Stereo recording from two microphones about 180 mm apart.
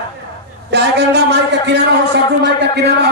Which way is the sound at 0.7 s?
70° right (ahead or behind).